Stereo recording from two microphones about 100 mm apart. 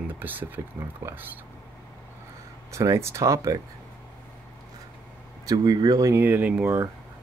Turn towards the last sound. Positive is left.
turn(degrees=-15)  # may be behind; listen again after turning